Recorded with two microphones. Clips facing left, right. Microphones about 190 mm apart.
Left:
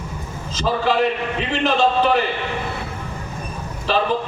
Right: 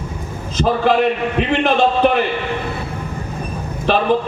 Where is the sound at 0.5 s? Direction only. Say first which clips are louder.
Right 4 dB; 55° right (ahead or behind).